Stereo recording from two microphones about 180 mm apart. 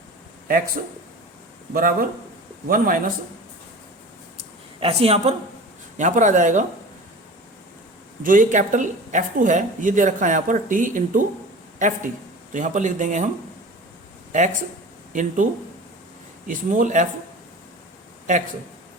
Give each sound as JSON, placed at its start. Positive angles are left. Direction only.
{"t": 1.7, "sound": "speech", "side_deg": -50}
{"t": 4.8, "sound": "speech", "side_deg": -35}
{"t": 8.2, "sound": "speech", "side_deg": -45}
{"t": 12.5, "sound": "speech", "side_deg": -45}
{"t": 14.3, "sound": "speech", "side_deg": -45}
{"t": 16.5, "sound": "speech", "side_deg": -45}
{"t": 18.3, "sound": "speech", "side_deg": -45}